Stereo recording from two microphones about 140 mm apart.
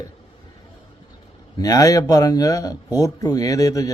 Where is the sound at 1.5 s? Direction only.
25° left (ahead or behind).